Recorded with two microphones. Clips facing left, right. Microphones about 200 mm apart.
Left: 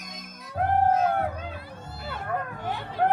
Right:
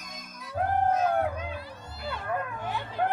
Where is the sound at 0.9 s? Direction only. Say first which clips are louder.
Left 2 dB; 25° left (ahead or behind).